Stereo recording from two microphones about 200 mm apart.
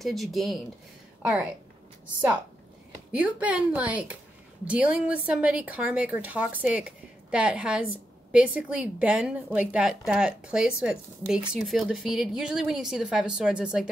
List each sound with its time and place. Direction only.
0.0 s a woman's voice: centre (ahead or behind)
3.1 s a woman's voice: 5° right (ahead or behind)